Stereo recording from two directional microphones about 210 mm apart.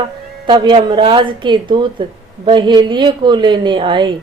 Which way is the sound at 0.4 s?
20° right (ahead or behind).